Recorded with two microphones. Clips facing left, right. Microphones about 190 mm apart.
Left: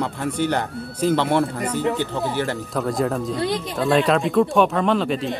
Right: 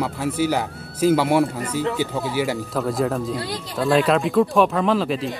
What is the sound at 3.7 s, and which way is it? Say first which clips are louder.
Speech: right 2 dB; centre (ahead or behind).